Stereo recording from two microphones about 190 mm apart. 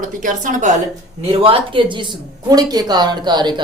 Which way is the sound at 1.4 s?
30° right (ahead or behind).